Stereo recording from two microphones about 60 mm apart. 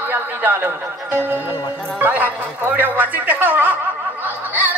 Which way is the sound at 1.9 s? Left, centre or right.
Right.